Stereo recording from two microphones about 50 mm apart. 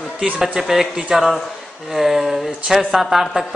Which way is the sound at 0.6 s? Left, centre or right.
Centre.